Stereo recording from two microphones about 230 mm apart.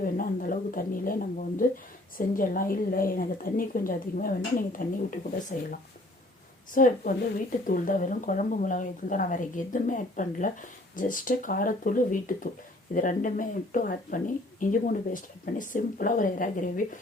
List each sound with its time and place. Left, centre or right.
0.0 s a woman's voice: left
6.7 s a woman's voice: left